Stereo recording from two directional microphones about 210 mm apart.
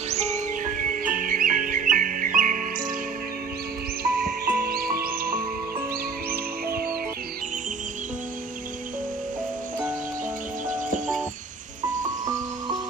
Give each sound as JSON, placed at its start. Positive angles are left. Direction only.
{"t": 0.1, "sound": "music", "side_deg": -30}
{"t": 4.0, "sound": "music", "side_deg": -45}
{"t": 10.7, "sound": "music", "side_deg": -40}